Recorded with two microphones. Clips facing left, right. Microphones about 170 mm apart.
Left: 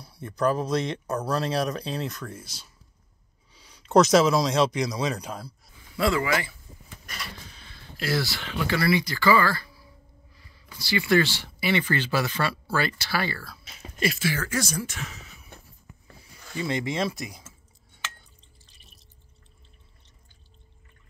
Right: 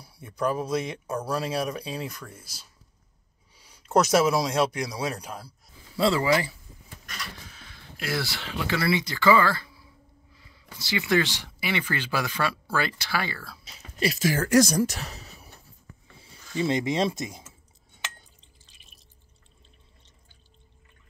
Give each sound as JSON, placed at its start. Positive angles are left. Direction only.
{"t": 0.0, "sound": "speech", "side_deg": -10}
{"t": 3.5, "sound": "speech", "side_deg": -10}
{"t": 5.9, "sound": "speech", "side_deg": -30}
{"t": 8.6, "sound": "speech", "side_deg": -25}
{"t": 13.5, "sound": "speech", "side_deg": -35}
{"t": 16.2, "sound": "speech", "side_deg": -25}